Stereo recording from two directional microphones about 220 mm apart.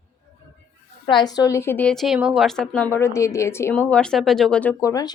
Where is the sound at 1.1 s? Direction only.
20° left (ahead or behind).